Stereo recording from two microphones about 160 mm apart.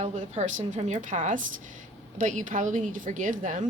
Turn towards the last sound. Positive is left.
turn(degrees=-50)  # may be behind; listen again after turning